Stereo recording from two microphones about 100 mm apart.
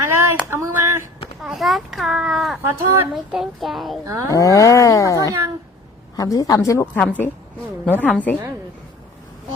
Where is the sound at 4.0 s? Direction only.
35° right (ahead or behind).